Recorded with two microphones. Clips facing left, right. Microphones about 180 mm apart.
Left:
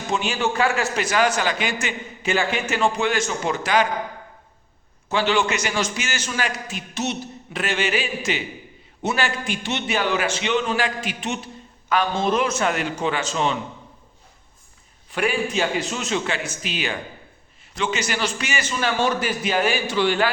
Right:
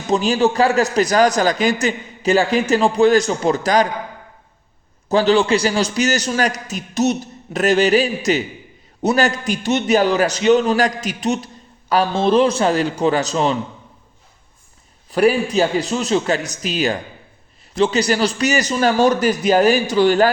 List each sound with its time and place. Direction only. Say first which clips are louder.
0.1 s a man's voice: right 8 dB; 35° right (ahead or behind)
5.0 s a man's voice: right 7 dB; 35° right (ahead or behind)
15.1 s a man's voice: right 8 dB; 35° right (ahead or behind)